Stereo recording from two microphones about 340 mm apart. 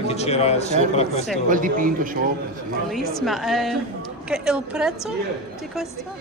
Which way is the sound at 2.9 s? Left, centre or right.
Centre.